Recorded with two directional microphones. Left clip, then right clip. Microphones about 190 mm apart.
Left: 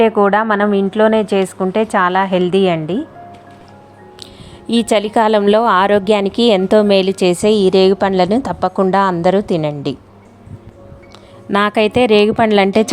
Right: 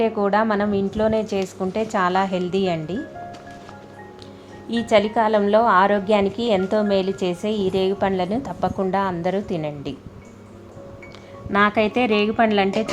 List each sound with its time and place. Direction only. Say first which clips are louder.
0.0 s speech: left 8 dB; 25° left (ahead or behind)
4.7 s a woman's voice: left 4 dB; 45° left (ahead or behind)
11.5 s a woman's voice: left 5 dB; 45° left (ahead or behind)